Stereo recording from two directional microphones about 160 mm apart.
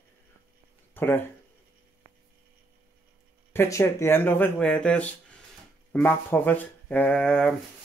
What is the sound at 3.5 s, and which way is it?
Speech, 15° left (ahead or behind).